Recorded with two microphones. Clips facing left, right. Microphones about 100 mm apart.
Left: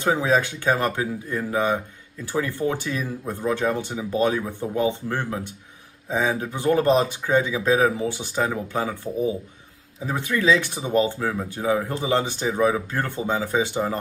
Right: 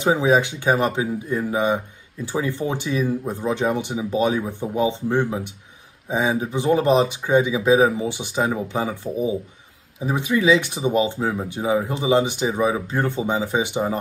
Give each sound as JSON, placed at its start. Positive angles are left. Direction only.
{"t": 0.0, "sound": "speech", "side_deg": -15}